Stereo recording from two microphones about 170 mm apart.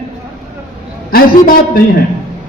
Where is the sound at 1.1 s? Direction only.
60° left (ahead or behind).